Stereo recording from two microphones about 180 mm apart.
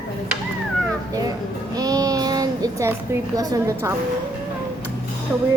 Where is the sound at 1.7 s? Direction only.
20° right (ahead or behind).